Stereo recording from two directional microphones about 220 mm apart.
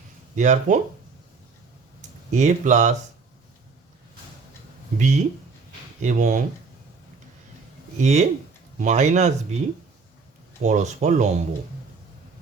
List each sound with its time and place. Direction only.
0.3 s speech: 35° right (ahead or behind)
2.3 s speech: 30° right (ahead or behind)
4.9 s speech: 30° right (ahead or behind)
7.9 s speech: 30° right (ahead or behind)
10.6 s speech: 30° right (ahead or behind)